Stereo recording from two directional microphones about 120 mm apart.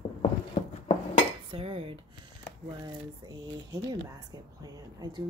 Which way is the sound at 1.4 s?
50° right (ahead or behind).